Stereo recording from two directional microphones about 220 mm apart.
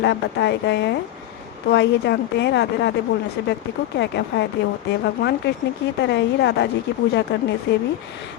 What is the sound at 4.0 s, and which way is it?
Speech, 50° left (ahead or behind).